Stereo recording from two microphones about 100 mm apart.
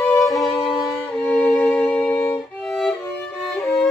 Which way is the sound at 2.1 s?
30° left (ahead or behind).